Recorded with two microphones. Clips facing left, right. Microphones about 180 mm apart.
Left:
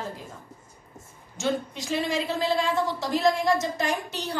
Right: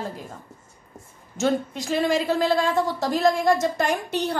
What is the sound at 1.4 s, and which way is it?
A woman's voice, 50° right (ahead or behind).